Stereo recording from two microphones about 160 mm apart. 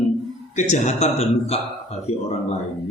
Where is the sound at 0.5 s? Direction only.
45° left (ahead or behind).